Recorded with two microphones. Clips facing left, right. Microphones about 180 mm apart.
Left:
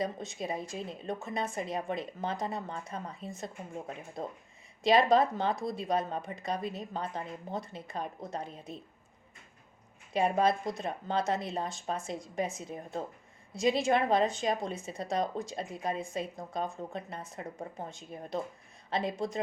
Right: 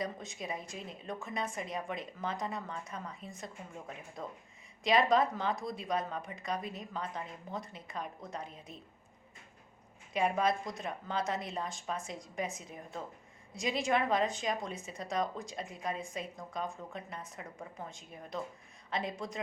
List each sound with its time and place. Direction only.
0.0 s speech: 25° left (ahead or behind)
10.1 s speech: 30° left (ahead or behind)